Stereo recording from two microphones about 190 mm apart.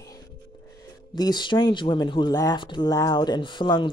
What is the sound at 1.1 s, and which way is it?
Speech, 20° left (ahead or behind).